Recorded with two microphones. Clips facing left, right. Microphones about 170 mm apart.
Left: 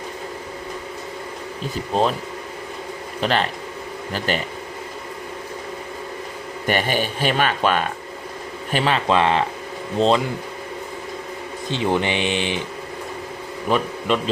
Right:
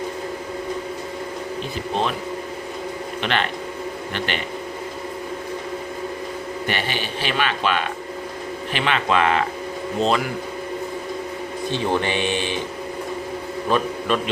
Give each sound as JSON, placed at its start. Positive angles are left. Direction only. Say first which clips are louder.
{"t": 1.9, "sound": "speech", "louder": "left 4 dB", "side_deg": 35}
{"t": 3.2, "sound": "speech", "louder": "left 3 dB", "side_deg": 35}
{"t": 6.7, "sound": "speech", "louder": "left 7 dB", "side_deg": 45}
{"t": 11.7, "sound": "speech", "louder": "left 1 dB", "side_deg": 15}
{"t": 13.7, "sound": "a man's voice", "louder": "left 1 dB", "side_deg": 20}